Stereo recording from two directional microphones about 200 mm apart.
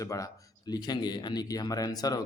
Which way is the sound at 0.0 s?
15° left (ahead or behind).